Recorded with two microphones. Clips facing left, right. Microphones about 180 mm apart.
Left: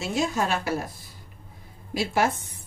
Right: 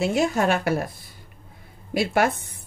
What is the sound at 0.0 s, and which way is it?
Speech, 60° right (ahead or behind).